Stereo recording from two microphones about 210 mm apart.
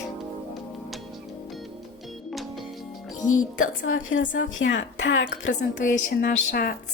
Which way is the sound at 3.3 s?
75° left (ahead or behind).